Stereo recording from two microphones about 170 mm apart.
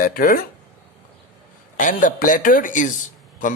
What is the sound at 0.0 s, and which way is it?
Speech, 55° left (ahead or behind).